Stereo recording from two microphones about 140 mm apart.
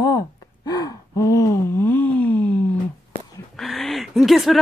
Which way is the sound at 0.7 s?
25° left (ahead or behind).